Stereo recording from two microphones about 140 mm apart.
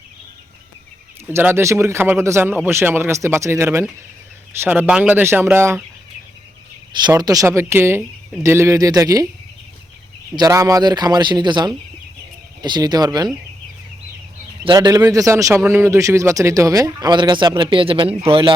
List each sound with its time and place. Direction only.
1.3 s speech: 15° right (ahead or behind)
7.1 s a man's voice: 25° right (ahead or behind)
10.3 s a man's voice: 25° right (ahead or behind)
14.6 s a man's voice: 30° right (ahead or behind)